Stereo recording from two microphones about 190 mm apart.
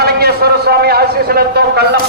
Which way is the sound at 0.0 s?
55° right (ahead or behind).